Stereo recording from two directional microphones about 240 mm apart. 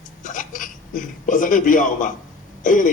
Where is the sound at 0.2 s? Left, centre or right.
Left.